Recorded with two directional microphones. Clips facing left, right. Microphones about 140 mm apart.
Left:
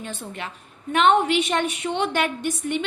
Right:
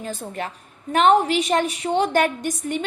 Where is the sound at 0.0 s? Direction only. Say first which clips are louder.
Right 4 dB; 40° right (ahead or behind).